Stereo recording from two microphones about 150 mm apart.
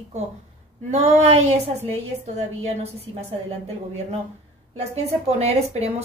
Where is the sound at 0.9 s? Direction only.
50° right (ahead or behind).